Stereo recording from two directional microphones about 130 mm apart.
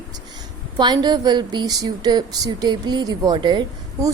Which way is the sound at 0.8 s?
35° right (ahead or behind).